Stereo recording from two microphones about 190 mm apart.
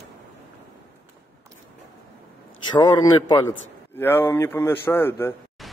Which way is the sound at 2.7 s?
20° left (ahead or behind).